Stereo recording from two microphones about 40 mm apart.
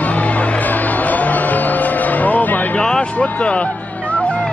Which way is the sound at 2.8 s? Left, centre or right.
Left.